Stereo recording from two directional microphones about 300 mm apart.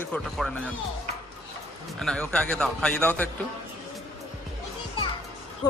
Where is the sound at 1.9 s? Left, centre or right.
Centre.